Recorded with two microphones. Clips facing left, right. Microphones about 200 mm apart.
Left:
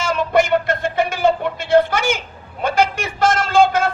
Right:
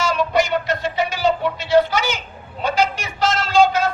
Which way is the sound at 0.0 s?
50° left (ahead or behind).